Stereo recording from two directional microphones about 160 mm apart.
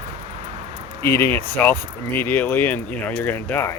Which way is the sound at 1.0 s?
15° left (ahead or behind).